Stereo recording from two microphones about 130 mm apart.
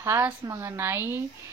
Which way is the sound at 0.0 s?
20° right (ahead or behind).